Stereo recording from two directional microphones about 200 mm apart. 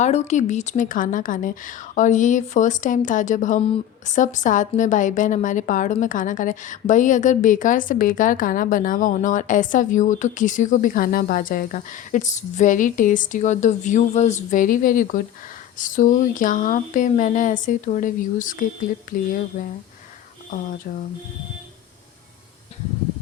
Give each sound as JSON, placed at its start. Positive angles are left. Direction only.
{"t": 0.0, "sound": "a woman's voice", "side_deg": 35}